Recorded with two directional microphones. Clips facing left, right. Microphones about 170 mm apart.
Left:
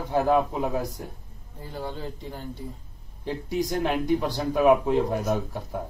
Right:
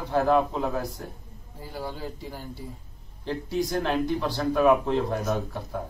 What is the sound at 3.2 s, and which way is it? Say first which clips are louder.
Speech: even; 15° left (ahead or behind).